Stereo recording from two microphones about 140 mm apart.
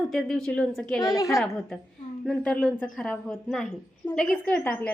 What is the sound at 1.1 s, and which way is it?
Speech, 20° left (ahead or behind).